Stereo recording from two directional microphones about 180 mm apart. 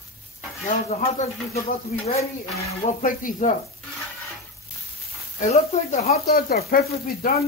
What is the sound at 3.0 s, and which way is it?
Speech, 50° left (ahead or behind).